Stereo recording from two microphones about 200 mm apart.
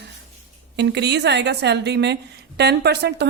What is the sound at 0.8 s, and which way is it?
A woman's voice, 55° right (ahead or behind).